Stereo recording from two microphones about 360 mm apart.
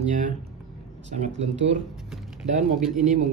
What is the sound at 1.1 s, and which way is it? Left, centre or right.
A man's voice, centre.